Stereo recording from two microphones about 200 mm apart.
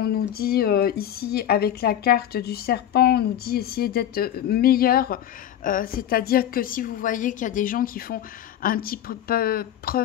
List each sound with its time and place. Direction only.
0.0 s speech: 50° left (ahead or behind)